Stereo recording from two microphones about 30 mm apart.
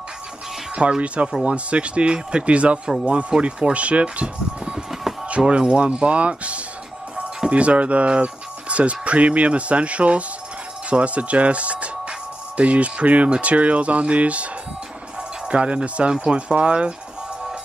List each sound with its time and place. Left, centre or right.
0.7 s speech: right
3.7 s speech: right